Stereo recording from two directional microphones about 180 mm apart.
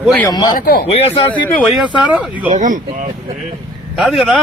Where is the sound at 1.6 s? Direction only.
Centre (ahead or behind).